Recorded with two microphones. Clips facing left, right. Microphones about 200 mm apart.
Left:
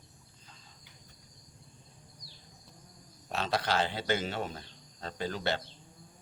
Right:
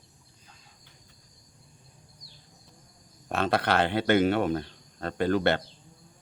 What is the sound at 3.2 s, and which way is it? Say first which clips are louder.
Speech: right 6 dB; 55° right (ahead or behind).